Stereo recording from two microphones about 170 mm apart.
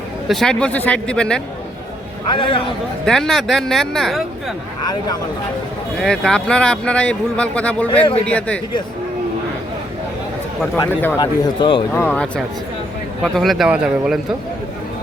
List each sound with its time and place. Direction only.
0.3 s speech: 5° left (ahead or behind)
2.2 s speech: 30° left (ahead or behind)
3.1 s speech: centre (ahead or behind)
6.0 s a man's voice: 5° left (ahead or behind)
10.8 s speech: 20° left (ahead or behind)
11.9 s speech: 10° left (ahead or behind); by 14.2 s 5° right (ahead or behind)